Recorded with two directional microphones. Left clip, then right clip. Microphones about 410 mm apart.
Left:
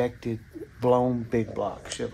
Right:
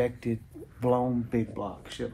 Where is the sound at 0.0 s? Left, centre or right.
Centre.